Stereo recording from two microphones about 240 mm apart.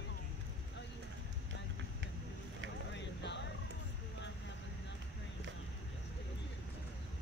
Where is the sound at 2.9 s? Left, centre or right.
Left.